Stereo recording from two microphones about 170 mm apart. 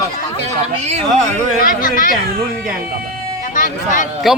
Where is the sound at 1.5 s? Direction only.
55° left (ahead or behind).